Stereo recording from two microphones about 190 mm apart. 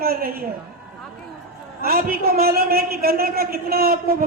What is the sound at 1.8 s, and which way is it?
A man's voice, 50° right (ahead or behind).